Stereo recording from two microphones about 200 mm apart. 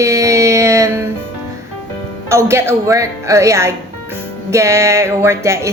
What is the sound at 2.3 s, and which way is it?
A woman's voice, 15° right (ahead or behind).